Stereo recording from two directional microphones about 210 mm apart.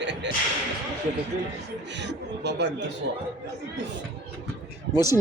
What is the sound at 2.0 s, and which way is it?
Speech, 55° right (ahead or behind).